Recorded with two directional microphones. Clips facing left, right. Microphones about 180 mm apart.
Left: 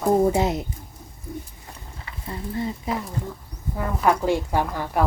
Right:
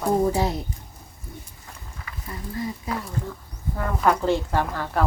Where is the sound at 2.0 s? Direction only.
25° left (ahead or behind).